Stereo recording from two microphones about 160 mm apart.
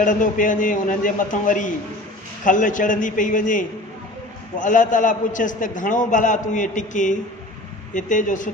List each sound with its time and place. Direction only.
0.0 s a man's voice: 55° left (ahead or behind)